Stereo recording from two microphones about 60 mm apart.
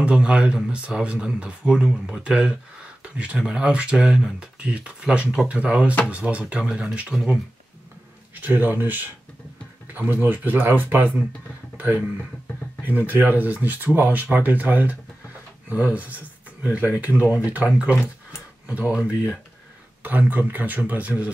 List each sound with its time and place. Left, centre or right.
0.0 s speech: centre
8.4 s speech: right
18.0 s a sound: right
20.0 s speech: right